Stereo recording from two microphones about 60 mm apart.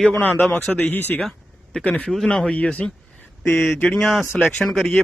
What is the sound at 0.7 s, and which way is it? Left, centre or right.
A man's voice, left.